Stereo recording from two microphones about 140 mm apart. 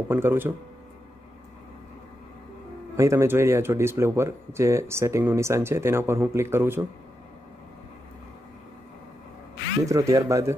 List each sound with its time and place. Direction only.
0.1 s speech: 15° right (ahead or behind)
3.0 s speech: 20° right (ahead or behind)
9.8 s speech: 25° right (ahead or behind)